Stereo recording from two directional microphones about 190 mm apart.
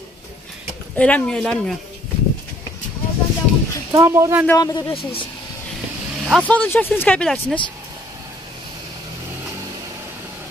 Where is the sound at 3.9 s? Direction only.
15° right (ahead or behind).